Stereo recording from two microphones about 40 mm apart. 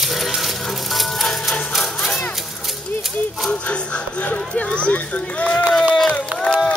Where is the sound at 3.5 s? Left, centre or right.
Left.